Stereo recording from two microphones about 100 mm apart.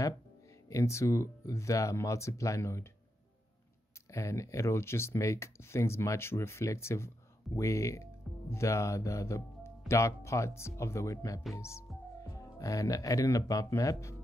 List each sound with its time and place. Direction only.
0.7 s speech: 30° left (ahead or behind)
4.1 s speech: 30° left (ahead or behind)